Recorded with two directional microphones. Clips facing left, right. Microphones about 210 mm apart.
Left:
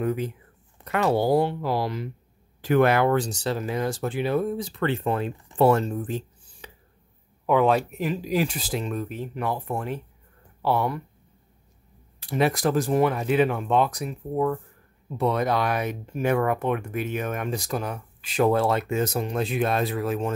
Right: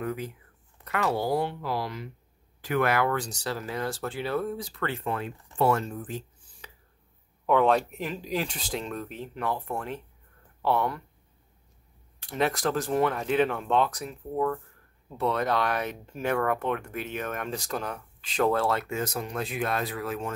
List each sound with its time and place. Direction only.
0.0 s speech: 25° left (ahead or behind)
7.4 s speech: 5° left (ahead or behind)
12.2 s speech: 10° left (ahead or behind); by 20.3 s 25° left (ahead or behind)